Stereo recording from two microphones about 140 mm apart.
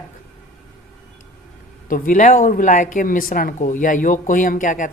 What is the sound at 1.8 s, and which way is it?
Speech, 80° left.